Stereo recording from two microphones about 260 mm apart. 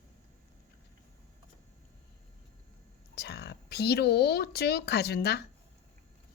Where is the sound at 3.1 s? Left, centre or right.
Left.